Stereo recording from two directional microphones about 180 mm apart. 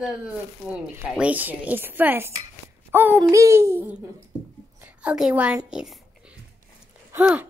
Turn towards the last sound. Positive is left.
turn(degrees=-5)  # may be behind; listen again after turning